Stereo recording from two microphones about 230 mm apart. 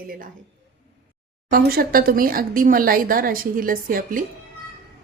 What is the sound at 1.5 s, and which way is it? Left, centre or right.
Speech, right.